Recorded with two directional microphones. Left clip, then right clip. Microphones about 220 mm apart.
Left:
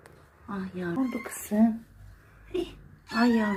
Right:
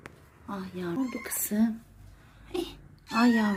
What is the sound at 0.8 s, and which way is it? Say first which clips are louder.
Speech: left 2 dB; 20° right (ahead or behind).